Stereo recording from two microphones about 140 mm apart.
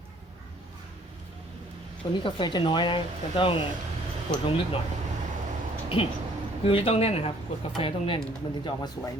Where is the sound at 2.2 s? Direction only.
35° left (ahead or behind).